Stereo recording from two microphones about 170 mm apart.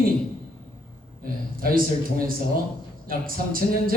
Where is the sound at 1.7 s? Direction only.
55° right (ahead or behind).